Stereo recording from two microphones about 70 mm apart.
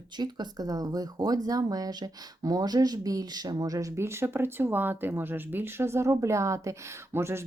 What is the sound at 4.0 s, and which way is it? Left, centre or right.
Speech, right.